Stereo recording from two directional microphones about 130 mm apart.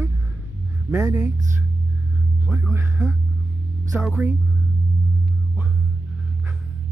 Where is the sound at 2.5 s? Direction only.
15° right (ahead or behind).